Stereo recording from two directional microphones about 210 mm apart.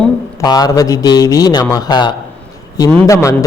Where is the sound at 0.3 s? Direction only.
20° left (ahead or behind).